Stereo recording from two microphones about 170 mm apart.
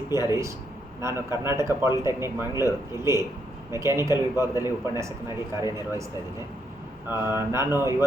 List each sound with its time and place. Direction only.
0.1 s a man's voice: 15° right (ahead or behind)
7.1 s a man's voice: 15° right (ahead or behind)